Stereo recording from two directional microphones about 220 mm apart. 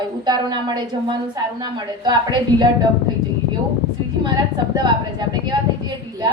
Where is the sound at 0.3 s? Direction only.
20° right (ahead or behind).